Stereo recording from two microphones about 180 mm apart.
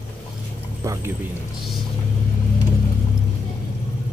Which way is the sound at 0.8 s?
15° right (ahead or behind).